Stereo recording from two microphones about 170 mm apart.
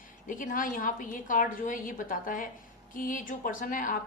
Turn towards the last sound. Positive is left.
turn(degrees=50)  # may be behind; listen again after turning